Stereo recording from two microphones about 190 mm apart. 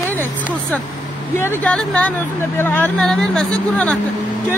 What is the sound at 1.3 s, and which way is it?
Speech, 10° left (ahead or behind).